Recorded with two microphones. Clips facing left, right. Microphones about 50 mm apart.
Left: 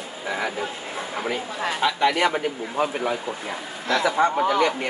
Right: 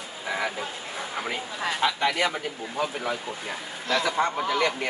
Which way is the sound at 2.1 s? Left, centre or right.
Left.